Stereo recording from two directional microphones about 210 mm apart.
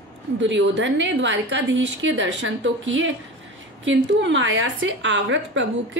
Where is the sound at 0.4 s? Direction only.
60° right (ahead or behind).